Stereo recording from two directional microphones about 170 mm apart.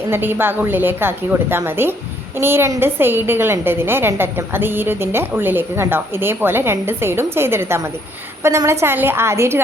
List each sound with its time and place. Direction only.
0.1 s a woman's voice: 10° right (ahead or behind)